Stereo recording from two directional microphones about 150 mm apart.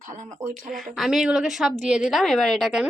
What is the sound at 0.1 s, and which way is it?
Speech, 55° right (ahead or behind).